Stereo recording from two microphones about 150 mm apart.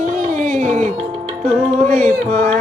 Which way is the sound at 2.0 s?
75° right (ahead or behind).